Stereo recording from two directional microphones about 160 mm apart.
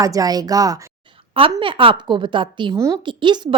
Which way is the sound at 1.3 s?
35° right (ahead or behind).